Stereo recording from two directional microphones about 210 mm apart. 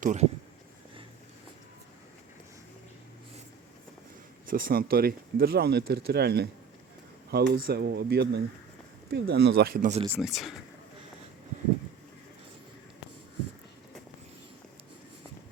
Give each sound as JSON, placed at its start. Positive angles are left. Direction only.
{"t": 0.0, "sound": "speech", "side_deg": -35}
{"t": 4.4, "sound": "speech", "side_deg": -45}
{"t": 10.1, "sound": "speech", "side_deg": 0}